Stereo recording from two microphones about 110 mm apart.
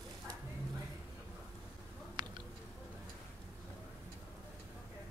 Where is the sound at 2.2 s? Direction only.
40° right (ahead or behind).